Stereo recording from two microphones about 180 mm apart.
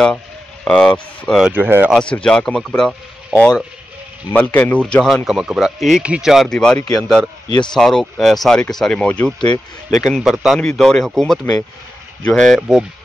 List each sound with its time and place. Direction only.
0.7 s speech: 5° left (ahead or behind)
1.5 s speech: 10° right (ahead or behind)
2.0 s speech: 5° left (ahead or behind)
7.4 s speech: 25° left (ahead or behind)
7.7 s speech: centre (ahead or behind)